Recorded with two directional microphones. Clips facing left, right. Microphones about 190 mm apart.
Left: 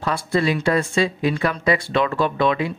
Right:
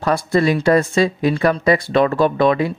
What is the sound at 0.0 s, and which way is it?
Speech, 45° right (ahead or behind).